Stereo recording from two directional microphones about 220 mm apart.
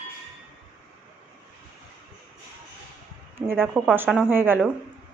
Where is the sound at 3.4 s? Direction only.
10° right (ahead or behind).